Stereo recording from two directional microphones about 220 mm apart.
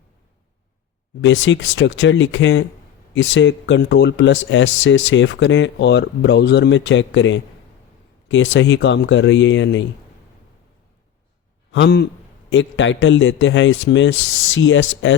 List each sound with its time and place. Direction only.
1.2 s speech: 55° left (ahead or behind)
11.7 s a man's voice: 50° left (ahead or behind)